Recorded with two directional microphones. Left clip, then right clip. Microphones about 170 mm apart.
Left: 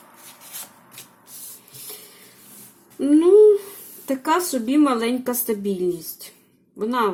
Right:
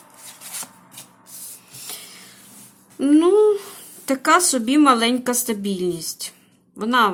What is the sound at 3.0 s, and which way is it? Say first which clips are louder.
A woman's voice: left 2 dB; 15° right (ahead or behind).